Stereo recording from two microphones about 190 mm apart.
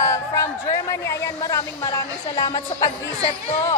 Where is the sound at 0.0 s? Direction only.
15° left (ahead or behind).